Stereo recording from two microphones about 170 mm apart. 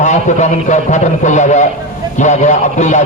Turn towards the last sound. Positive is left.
turn(degrees=45)  # may be behind; listen again after turning